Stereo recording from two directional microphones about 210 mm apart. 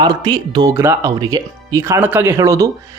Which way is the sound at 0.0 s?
20° right (ahead or behind).